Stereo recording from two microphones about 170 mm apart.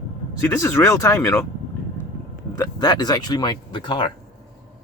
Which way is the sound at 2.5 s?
20° left (ahead or behind).